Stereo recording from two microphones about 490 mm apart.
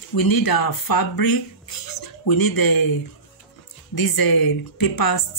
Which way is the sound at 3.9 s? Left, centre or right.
Left.